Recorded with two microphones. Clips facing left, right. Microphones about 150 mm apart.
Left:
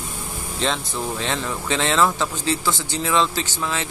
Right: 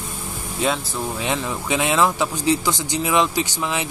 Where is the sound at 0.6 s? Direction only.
10° right (ahead or behind).